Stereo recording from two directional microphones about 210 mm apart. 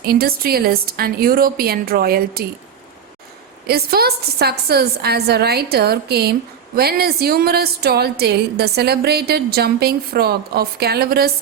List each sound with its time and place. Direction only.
0.0 s speech: 45° right (ahead or behind)
3.7 s speech: 45° right (ahead or behind)